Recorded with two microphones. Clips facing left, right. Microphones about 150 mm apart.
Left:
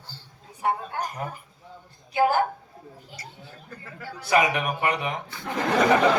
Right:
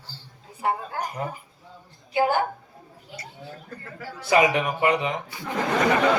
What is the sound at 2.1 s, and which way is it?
Speech, 25° right (ahead or behind).